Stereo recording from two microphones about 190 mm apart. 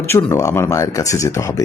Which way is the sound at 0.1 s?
15° left (ahead or behind).